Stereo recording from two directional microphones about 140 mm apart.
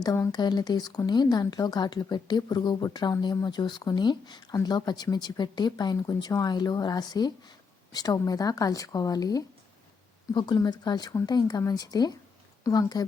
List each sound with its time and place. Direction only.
0.0 s a woman's voice: 30° left (ahead or behind)